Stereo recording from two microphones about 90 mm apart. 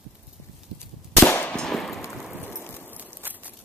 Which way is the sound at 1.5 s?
5° left (ahead or behind).